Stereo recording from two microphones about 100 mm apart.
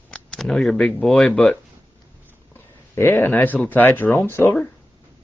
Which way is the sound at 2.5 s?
25° left (ahead or behind).